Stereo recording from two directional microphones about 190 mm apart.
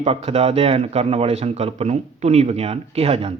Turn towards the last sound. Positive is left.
turn(degrees=-30)  # may be behind; listen again after turning